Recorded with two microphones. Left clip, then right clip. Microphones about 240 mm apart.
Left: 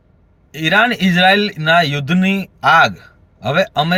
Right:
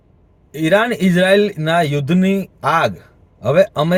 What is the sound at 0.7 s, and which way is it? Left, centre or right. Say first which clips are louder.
A man's voice: left 2 dB; centre.